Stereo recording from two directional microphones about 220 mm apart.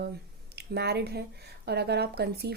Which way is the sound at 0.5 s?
50° right (ahead or behind).